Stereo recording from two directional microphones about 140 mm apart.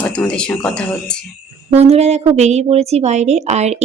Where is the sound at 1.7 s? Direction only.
50° right (ahead or behind).